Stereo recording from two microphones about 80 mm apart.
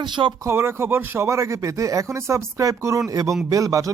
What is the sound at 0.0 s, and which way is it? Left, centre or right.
Speech, right.